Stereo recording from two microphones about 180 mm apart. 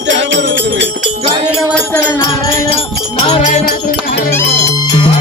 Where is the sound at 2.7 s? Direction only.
35° left (ahead or behind).